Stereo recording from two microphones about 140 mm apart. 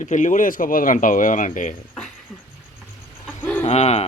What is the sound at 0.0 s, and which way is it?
Speech, 60° left (ahead or behind).